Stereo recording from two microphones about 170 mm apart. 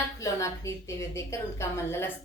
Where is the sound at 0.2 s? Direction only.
20° left (ahead or behind).